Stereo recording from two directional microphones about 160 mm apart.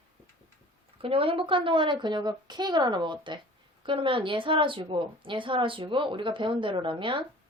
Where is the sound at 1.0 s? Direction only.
35° right (ahead or behind).